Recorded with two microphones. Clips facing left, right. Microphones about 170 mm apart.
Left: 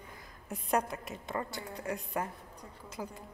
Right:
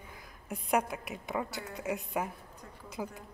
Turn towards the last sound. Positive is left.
turn(degrees=-10)  # may be behind; listen again after turning